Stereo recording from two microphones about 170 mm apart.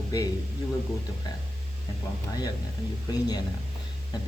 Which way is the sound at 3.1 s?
25° left (ahead or behind).